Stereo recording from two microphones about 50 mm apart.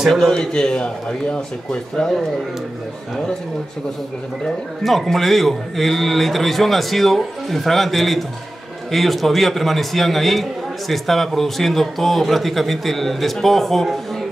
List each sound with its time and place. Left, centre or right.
0.3 s speech: centre
4.8 s a man's voice: centre